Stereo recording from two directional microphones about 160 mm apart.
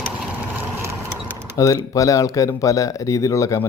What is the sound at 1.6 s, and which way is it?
Speech, 20° left (ahead or behind).